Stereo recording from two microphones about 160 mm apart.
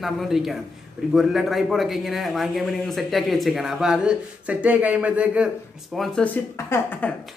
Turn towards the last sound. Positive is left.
turn(degrees=15)  # may be behind; listen again after turning